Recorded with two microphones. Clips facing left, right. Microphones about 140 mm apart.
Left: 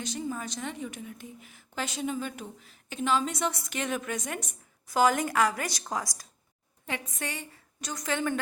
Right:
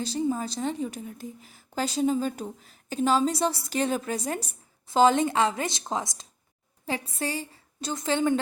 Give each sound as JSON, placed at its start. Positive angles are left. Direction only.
{"t": 0.0, "sound": "a woman's voice", "side_deg": -30}